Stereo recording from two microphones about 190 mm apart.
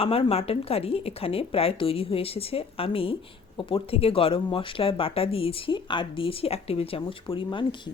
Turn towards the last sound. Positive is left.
turn(degrees=25)  # may be behind; listen again after turning